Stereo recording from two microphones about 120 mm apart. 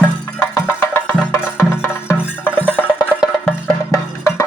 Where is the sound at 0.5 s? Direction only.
20° left (ahead or behind).